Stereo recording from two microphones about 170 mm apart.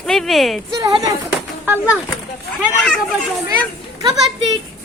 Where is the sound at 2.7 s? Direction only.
5° left (ahead or behind).